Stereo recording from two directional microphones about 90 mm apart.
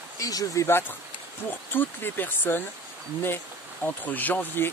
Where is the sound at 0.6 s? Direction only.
25° left (ahead or behind).